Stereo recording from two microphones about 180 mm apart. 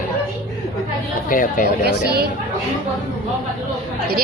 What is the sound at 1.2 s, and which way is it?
Speech, 50° left (ahead or behind).